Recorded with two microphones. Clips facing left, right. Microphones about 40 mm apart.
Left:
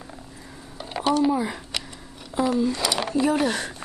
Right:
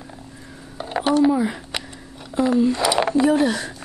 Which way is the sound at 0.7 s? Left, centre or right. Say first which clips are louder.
Right 4 dB; centre.